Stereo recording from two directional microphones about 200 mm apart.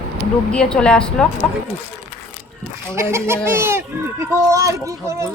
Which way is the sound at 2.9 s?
15° right (ahead or behind).